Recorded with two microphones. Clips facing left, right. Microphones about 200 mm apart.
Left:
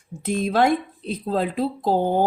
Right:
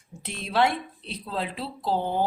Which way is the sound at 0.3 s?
45° left (ahead or behind).